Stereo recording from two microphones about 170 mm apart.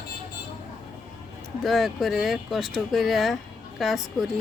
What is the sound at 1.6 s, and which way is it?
A woman's voice, centre (ahead or behind).